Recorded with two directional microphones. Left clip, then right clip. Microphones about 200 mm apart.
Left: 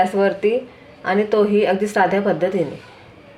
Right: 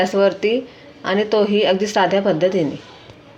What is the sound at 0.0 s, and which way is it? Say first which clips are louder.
A woman's voice: right 1 dB; 40° right (ahead or behind).